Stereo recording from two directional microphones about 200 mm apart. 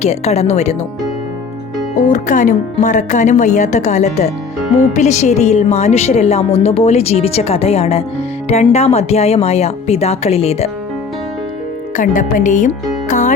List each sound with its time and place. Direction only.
0.0 s a woman's voice: 35° left (ahead or behind)
2.0 s a woman's voice: 40° left (ahead or behind)
11.9 s a woman's voice: 40° left (ahead or behind)